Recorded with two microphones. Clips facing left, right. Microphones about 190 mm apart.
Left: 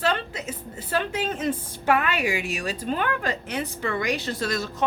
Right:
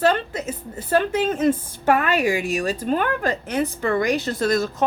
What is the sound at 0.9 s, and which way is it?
A woman's voice, 45° right (ahead or behind).